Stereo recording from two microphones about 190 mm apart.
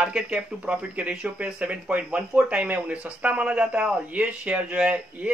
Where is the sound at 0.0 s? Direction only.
5° right (ahead or behind).